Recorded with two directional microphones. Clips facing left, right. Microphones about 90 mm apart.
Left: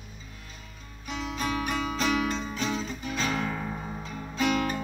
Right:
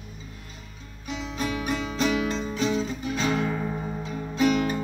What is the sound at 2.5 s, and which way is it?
Music, 25° right (ahead or behind).